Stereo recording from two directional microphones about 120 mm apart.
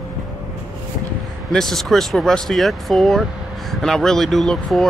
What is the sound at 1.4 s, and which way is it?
Speech, centre (ahead or behind).